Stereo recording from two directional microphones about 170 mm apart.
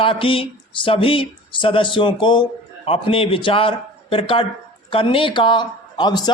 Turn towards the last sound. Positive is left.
turn(degrees=25)  # may be behind; listen again after turning